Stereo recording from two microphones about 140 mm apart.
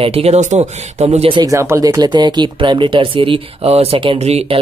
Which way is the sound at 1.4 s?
20° right (ahead or behind).